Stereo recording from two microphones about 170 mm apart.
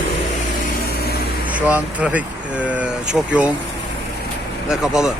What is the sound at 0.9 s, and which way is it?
Vehicle, 65° left (ahead or behind).